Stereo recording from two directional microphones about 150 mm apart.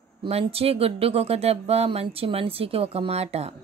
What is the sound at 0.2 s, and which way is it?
A woman's voice, 40° right (ahead or behind).